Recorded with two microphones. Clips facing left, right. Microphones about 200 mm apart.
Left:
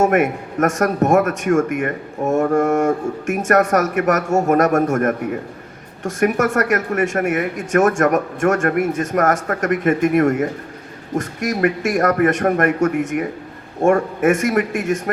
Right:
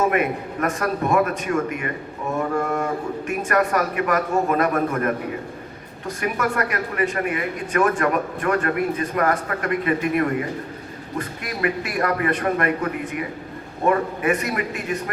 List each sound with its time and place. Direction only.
0.0 s a man's voice: 45° left (ahead or behind)
6.1 s a man's voice: 45° left (ahead or behind)